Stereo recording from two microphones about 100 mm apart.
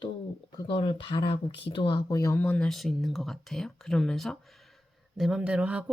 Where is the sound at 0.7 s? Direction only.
60° left (ahead or behind); by 2.3 s 40° left (ahead or behind).